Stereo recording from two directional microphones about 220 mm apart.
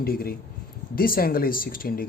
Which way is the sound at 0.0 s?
45° left (ahead or behind).